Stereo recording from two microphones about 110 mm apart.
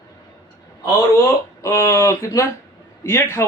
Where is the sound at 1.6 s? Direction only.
25° left (ahead or behind).